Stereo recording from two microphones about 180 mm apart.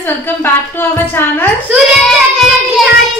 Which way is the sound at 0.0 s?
10° left (ahead or behind).